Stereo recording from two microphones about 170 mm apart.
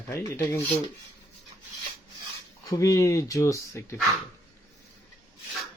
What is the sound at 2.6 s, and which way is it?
A man's voice, 20° left (ahead or behind).